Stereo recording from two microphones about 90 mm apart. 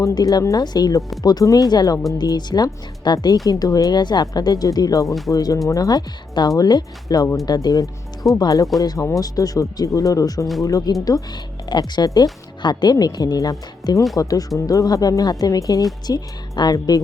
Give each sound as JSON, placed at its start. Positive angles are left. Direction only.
{"t": 0.0, "sound": "speech", "side_deg": 45}
{"t": 5.0, "sound": "speech", "side_deg": 0}
{"t": 5.3, "sound": "speech", "side_deg": 45}